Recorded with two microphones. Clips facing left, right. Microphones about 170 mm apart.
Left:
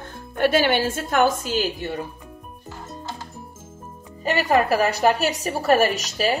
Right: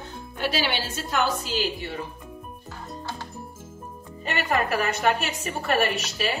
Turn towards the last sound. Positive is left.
turn(degrees=40)  # may be behind; listen again after turning